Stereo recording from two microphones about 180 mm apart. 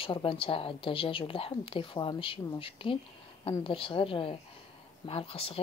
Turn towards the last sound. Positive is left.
turn(degrees=30)  # may be behind; listen again after turning